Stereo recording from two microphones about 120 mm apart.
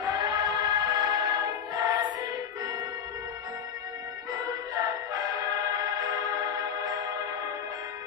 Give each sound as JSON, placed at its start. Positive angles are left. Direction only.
{"t": 0.0, "sound": "music", "side_deg": -30}
{"t": 5.1, "sound": "music", "side_deg": -30}